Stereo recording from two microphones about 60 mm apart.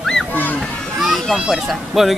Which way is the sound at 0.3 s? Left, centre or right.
Left.